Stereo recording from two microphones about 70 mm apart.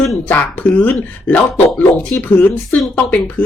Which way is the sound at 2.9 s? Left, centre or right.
Left.